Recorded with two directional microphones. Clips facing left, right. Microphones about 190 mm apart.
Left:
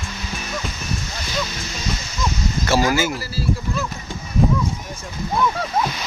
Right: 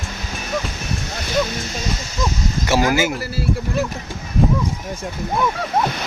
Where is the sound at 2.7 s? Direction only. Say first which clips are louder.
Right 1 dB; 20° right (ahead or behind).